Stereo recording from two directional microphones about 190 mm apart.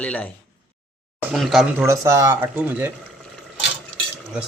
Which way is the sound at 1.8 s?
15° right (ahead or behind).